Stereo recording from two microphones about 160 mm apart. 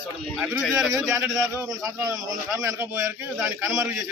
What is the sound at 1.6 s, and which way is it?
A man's voice, 20° right (ahead or behind).